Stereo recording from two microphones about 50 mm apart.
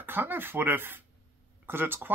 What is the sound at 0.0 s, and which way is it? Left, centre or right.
Speech, right.